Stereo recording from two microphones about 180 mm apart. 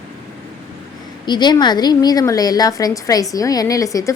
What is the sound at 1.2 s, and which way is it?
A woman's voice, 25° left (ahead or behind).